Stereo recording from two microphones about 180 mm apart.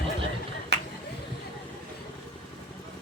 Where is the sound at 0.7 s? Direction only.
70° right (ahead or behind).